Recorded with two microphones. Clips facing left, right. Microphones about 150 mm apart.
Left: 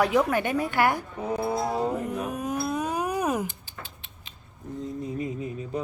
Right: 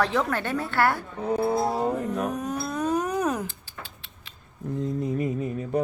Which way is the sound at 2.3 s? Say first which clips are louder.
Left 1 dB; 10° left (ahead or behind).